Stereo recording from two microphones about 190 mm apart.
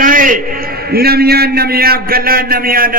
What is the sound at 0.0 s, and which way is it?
A man's voice, 45° right (ahead or behind).